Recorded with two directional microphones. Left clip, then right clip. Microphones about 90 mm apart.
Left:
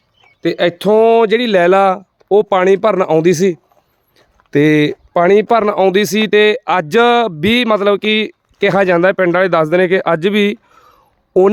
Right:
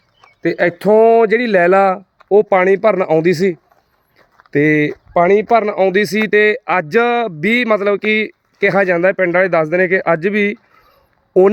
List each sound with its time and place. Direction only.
0.4 s speech: 5° left (ahead or behind)
2.3 s speech: 35° left (ahead or behind)
4.5 s speech: 35° left (ahead or behind)
5.1 s speech: 75° left (ahead or behind); by 5.9 s 55° left (ahead or behind)
5.9 s speech: 30° left (ahead or behind); by 7.3 s 50° left (ahead or behind)
7.4 s speech: 35° left (ahead or behind)
9.0 s speech: 55° left (ahead or behind)
9.4 s speech: 45° left (ahead or behind)